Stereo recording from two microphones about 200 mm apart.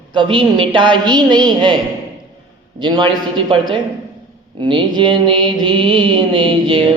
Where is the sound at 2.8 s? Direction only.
25° right (ahead or behind).